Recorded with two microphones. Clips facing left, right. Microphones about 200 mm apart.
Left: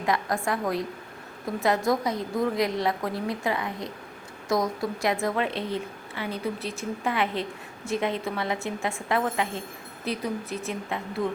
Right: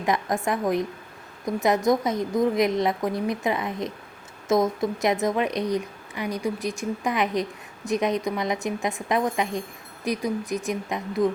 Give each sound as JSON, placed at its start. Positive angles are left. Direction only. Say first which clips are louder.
{"t": 0.0, "sound": "a woman's voice", "louder": "right 2 dB", "side_deg": -20}